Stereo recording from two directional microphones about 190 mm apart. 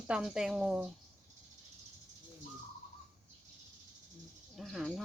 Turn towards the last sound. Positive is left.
turn(degrees=0)  # may be behind; listen again after turning